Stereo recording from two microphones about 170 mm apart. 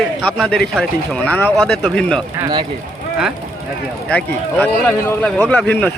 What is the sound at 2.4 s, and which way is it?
Speech, 25° right (ahead or behind).